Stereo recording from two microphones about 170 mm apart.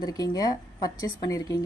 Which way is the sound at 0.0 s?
20° left (ahead or behind).